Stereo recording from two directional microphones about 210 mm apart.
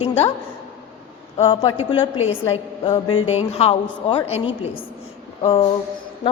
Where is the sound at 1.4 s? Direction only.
25° left (ahead or behind).